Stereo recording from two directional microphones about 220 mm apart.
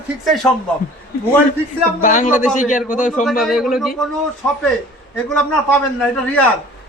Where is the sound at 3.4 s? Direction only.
Centre (ahead or behind).